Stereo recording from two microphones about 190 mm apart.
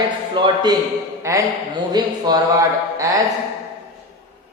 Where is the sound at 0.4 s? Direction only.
25° right (ahead or behind).